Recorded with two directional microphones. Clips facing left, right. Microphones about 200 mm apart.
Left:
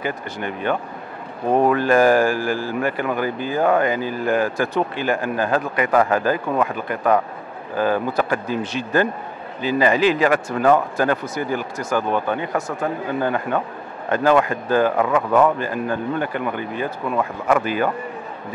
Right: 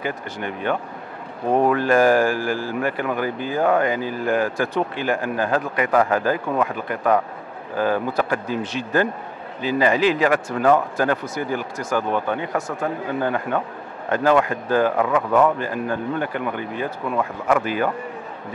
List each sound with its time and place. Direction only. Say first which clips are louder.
0.0 s a man's voice: left 1 dB; 10° left (ahead or behind)